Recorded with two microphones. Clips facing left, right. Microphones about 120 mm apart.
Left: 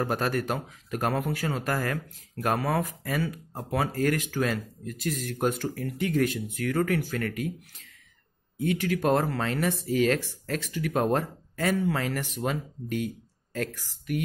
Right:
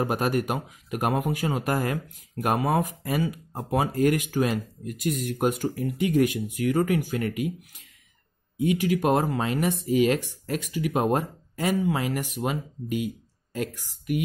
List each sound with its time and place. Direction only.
0.0 s speech: 15° right (ahead or behind)
8.5 s speech: 15° right (ahead or behind)